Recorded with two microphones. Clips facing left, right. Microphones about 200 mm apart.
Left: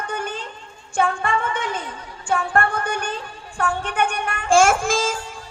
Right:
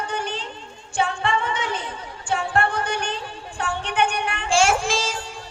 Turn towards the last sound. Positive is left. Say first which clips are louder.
# left 3 dB
turn(degrees=50)  # may be behind; listen again after turning